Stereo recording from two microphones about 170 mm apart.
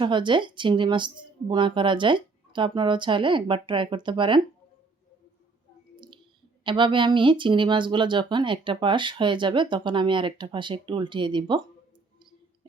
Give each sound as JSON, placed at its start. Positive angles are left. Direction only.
{"t": 0.0, "sound": "speech", "side_deg": -30}
{"t": 6.7, "sound": "speech", "side_deg": -30}